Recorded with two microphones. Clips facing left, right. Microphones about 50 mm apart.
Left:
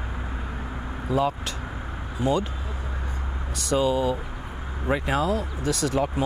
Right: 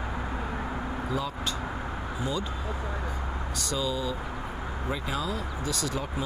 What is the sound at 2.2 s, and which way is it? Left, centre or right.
Speech, left.